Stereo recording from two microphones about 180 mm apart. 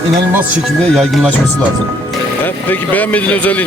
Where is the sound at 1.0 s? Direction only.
Centre (ahead or behind).